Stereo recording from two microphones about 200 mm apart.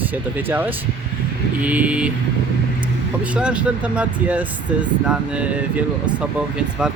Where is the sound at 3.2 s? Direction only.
5° right (ahead or behind).